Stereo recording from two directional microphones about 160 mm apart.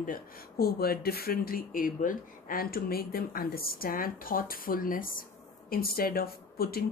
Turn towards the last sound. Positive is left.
turn(degrees=75)  # may be behind; listen again after turning